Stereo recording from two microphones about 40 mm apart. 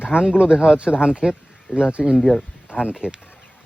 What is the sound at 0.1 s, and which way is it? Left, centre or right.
Speech, left.